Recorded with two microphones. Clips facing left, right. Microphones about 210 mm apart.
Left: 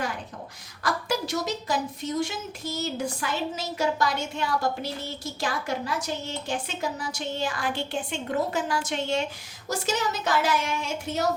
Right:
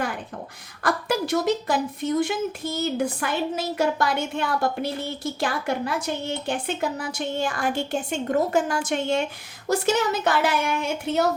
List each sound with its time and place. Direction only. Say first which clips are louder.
0.8 s a woman's voice: right 4 dB; 55° right (ahead or behind)